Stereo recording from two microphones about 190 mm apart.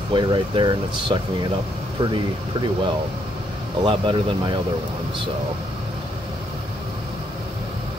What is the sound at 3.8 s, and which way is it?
Speech, 25° right (ahead or behind).